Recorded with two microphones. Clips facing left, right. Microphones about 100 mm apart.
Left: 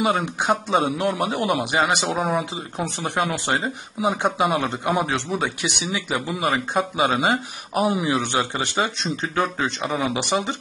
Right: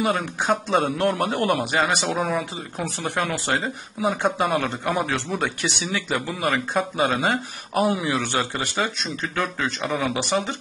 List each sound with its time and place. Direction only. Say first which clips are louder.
0.0 s speech: left 2 dB; 20° left (ahead or behind)